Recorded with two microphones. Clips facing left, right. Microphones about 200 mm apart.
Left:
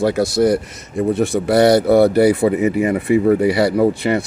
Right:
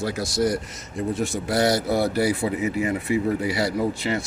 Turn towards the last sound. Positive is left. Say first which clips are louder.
# left 9 dB
turn(degrees=65)  # may be behind; listen again after turning